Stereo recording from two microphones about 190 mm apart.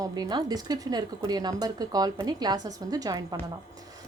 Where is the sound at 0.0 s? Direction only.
20° right (ahead or behind).